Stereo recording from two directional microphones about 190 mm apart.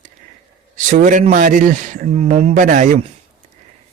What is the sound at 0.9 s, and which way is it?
Speech, 40° right (ahead or behind).